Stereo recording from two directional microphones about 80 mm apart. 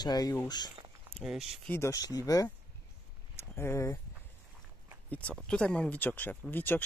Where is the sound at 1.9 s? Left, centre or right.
Left.